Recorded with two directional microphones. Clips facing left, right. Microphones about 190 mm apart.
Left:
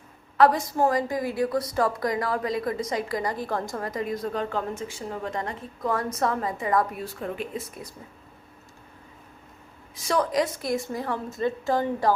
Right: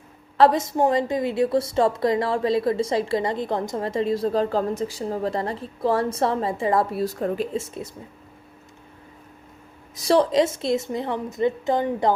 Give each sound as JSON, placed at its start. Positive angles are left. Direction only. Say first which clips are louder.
{"t": 0.3, "sound": "a woman's voice", "louder": "right 2 dB", "side_deg": -25}
{"t": 7.5, "sound": "a woman's voice", "louder": "right 6 dB", "side_deg": -25}
{"t": 9.9, "sound": "a woman's voice", "louder": "right 6 dB", "side_deg": -35}